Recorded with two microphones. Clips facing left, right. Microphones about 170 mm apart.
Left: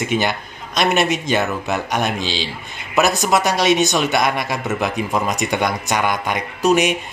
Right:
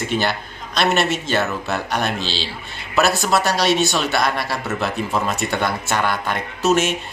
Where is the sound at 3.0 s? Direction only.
15° left (ahead or behind).